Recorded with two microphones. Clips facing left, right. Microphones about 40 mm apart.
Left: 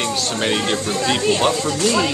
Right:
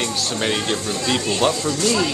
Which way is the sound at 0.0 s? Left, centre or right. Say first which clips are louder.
Left 2 dB; centre.